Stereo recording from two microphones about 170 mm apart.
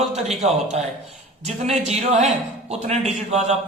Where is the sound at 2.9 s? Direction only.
40° right (ahead or behind).